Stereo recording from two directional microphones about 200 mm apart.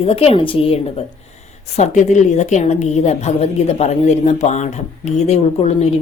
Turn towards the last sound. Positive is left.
turn(degrees=35)  # may be behind; listen again after turning